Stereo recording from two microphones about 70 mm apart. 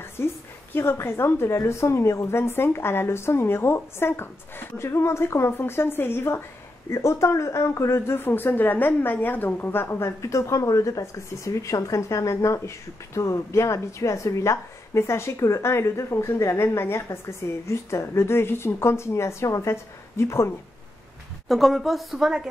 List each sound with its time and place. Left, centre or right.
0.2 s a woman's voice: left
21.5 s a woman's voice: centre